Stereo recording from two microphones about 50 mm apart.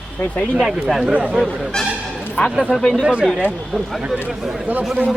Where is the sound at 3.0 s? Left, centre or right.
Right.